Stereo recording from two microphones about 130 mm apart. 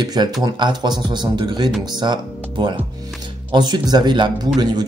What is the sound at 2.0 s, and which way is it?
Music, 35° right (ahead or behind).